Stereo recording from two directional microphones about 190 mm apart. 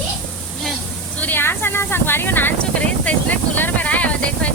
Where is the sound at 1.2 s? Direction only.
10° left (ahead or behind).